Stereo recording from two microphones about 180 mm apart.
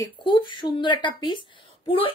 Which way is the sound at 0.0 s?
25° left (ahead or behind).